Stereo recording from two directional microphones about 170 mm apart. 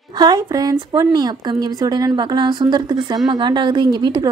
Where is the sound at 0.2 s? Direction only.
20° right (ahead or behind).